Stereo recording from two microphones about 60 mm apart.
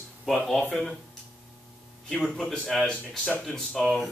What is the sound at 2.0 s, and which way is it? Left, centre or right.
A woman's voice, centre.